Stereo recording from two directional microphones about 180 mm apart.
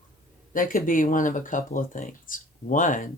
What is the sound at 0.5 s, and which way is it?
Speech, 50° left (ahead or behind).